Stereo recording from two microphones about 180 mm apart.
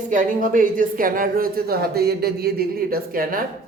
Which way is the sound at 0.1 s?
50° right (ahead or behind).